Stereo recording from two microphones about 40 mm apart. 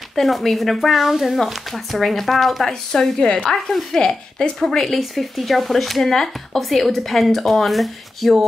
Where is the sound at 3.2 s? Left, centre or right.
Left.